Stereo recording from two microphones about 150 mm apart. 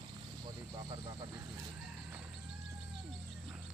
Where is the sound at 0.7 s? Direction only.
30° right (ahead or behind).